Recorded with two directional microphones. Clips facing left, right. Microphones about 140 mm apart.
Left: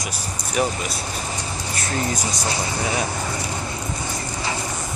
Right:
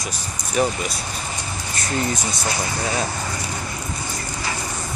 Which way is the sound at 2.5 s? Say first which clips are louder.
Even; 25° left (ahead or behind).